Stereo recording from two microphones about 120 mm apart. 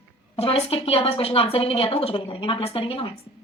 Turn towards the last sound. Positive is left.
turn(degrees=50)  # may be behind; listen again after turning